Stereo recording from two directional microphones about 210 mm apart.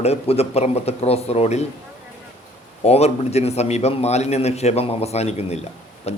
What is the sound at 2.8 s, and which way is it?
A man's voice, 30° left (ahead or behind).